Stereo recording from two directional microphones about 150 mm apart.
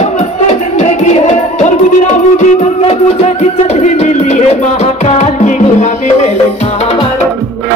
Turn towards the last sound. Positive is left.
turn(degrees=45)  # may be behind; listen again after turning